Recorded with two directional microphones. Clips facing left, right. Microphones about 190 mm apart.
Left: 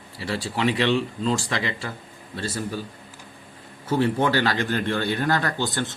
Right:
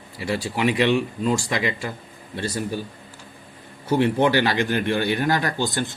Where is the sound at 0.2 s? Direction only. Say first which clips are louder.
Right 2 dB; 15° right (ahead or behind).